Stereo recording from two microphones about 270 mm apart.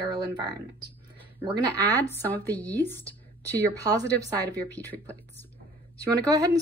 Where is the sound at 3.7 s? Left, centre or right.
Centre.